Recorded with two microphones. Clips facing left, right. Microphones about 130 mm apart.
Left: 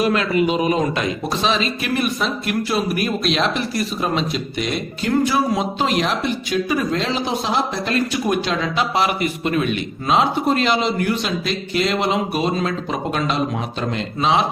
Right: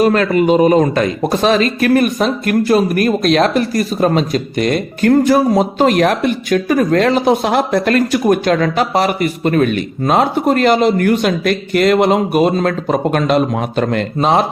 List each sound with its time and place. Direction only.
0.0 s speech: 45° right (ahead or behind)